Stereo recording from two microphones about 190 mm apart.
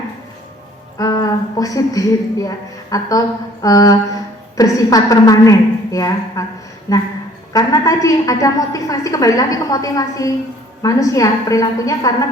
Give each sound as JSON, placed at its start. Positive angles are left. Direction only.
{"t": 0.9, "sound": "a woman's voice", "side_deg": 20}